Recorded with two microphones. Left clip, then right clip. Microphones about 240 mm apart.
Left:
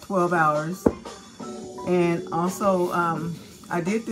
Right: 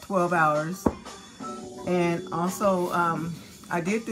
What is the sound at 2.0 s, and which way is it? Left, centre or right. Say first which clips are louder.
Speech: left 3 dB; centre.